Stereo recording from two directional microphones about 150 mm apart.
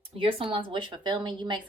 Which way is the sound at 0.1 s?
40° right (ahead or behind).